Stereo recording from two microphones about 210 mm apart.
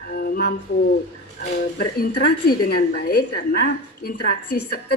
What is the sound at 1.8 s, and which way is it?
A woman's voice, 50° left (ahead or behind).